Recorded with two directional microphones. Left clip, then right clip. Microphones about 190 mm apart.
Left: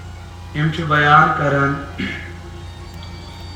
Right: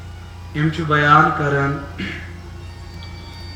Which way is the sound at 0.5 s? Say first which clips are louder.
Left 1 dB; 55° right (ahead or behind).